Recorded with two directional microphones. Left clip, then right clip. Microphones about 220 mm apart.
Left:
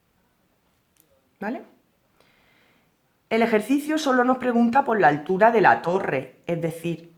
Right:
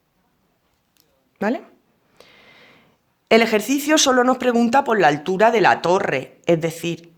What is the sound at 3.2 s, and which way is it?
Speech, 40° right (ahead or behind).